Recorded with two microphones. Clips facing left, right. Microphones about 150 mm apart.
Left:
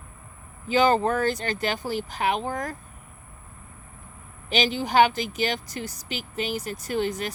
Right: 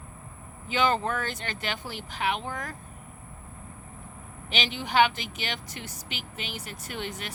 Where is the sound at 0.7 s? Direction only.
40° left (ahead or behind).